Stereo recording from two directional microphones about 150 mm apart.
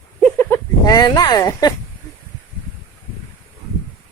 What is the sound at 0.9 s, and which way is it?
Speech, 25° left (ahead or behind).